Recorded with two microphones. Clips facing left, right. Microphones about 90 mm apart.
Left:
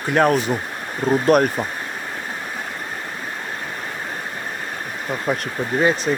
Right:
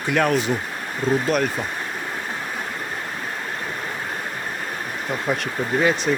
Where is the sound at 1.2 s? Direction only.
55° left (ahead or behind).